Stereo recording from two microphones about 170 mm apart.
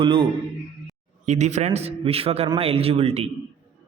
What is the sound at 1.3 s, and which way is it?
A man's voice, 40° right (ahead or behind).